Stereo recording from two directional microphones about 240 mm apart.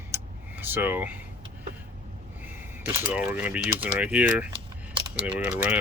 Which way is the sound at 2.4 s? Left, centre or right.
Centre.